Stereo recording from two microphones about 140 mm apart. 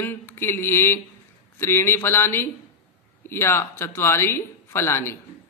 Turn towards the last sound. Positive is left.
turn(degrees=20)  # may be behind; listen again after turning